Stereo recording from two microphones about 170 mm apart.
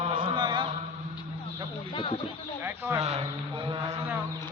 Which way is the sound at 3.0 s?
35° right (ahead or behind).